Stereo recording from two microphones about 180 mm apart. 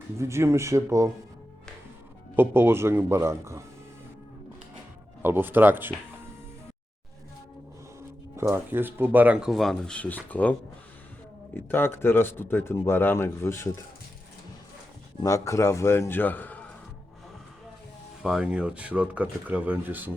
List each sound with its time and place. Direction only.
0.2 s speech: 15° right (ahead or behind)
2.3 s speech: 10° right (ahead or behind)
5.2 s speech: 10° right (ahead or behind)
8.4 s speech: 15° right (ahead or behind); by 10.5 s 10° left (ahead or behind)
11.5 s speech: 10° left (ahead or behind)
15.2 s speech: 15° left (ahead or behind)
18.2 s speech: 5° right (ahead or behind)